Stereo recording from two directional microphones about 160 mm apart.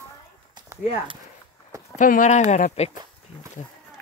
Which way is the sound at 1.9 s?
55° left (ahead or behind).